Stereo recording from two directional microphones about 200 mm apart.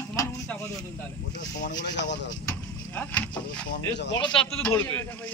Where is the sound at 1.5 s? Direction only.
60° left (ahead or behind).